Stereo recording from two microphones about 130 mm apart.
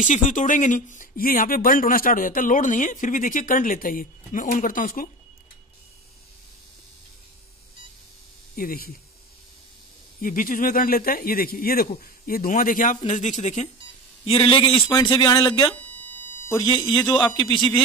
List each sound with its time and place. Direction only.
0.0 s speech: 75° left (ahead or behind); by 5.1 s 90° left
10.2 s speech: 90° left
12.4 s speech: 90° left; by 13.7 s 60° left (ahead or behind)
14.2 s a man's voice: 45° left (ahead or behind)
15.7 s a sound: 10° left (ahead or behind)
16.5 s speech: 35° left (ahead or behind)